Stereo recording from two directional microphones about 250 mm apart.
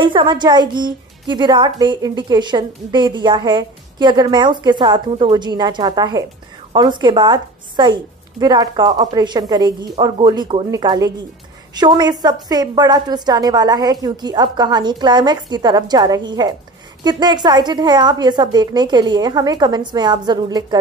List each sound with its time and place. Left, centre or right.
0.0 s a woman's voice: centre